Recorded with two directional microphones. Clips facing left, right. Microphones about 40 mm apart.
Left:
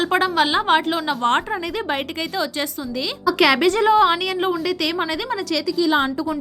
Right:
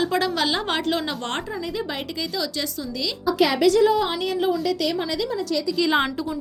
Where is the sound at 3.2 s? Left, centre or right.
Left.